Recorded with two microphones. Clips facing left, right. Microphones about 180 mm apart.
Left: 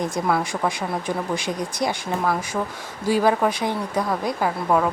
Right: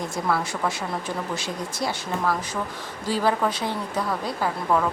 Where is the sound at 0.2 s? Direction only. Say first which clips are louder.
Left 1 dB; 20° left (ahead or behind).